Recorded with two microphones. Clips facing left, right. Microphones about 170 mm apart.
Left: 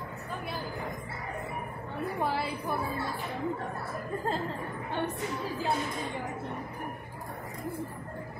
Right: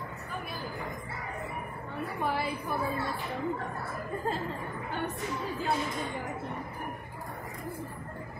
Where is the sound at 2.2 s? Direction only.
30° left (ahead or behind).